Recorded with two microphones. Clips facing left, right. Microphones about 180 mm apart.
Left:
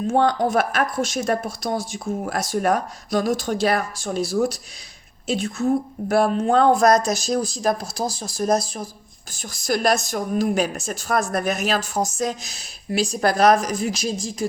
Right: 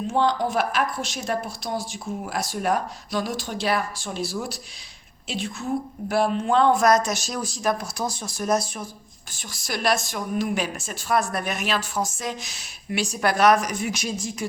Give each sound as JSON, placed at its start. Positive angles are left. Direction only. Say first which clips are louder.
{"t": 0.1, "sound": "speech", "louder": "left 4 dB", "side_deg": 50}